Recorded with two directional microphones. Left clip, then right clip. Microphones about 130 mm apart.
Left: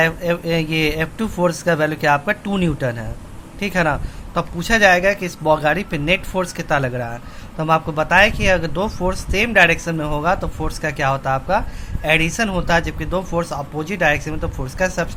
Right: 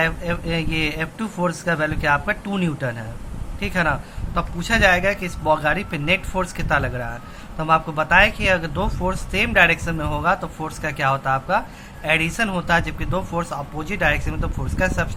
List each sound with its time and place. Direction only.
0.0 s speech: 30° left (ahead or behind)